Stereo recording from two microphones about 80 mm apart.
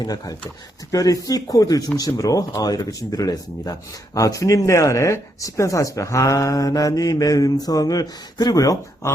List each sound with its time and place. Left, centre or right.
0.0 s speech: left